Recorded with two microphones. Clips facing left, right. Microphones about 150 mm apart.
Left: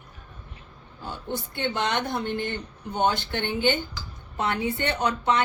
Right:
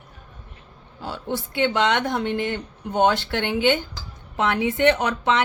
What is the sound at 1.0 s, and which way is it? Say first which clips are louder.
Speech: right 4 dB; 85° right.